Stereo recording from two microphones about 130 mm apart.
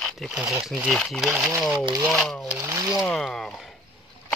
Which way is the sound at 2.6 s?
25° right (ahead or behind).